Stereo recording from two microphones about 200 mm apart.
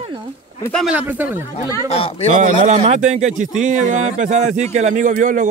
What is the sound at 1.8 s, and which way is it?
Speech, 30° left (ahead or behind).